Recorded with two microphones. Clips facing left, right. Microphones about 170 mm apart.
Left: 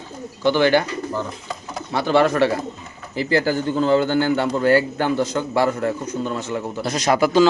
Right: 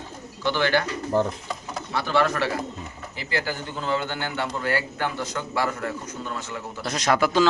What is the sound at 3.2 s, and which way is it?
A man's voice, 35° left (ahead or behind).